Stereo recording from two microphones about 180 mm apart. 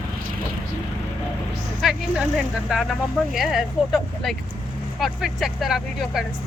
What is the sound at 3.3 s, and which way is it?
Speech, centre (ahead or behind).